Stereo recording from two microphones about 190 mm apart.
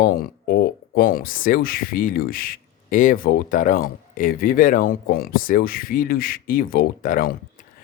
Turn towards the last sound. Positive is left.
turn(degrees=45)  # may be behind; listen again after turning